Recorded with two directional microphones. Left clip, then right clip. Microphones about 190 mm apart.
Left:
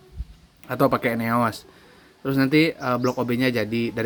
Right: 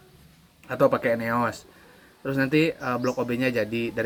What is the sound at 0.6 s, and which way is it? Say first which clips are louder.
Speech: even; 60° left (ahead or behind).